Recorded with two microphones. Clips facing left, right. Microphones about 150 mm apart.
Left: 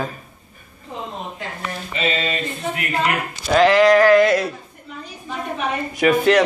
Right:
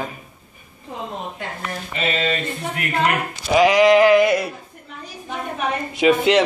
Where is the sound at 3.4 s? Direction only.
10° right (ahead or behind).